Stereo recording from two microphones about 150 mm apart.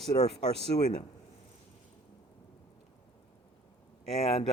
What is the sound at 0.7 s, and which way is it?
Speech, 50° left (ahead or behind).